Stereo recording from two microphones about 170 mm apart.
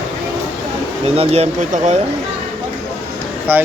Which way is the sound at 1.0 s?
35° right (ahead or behind).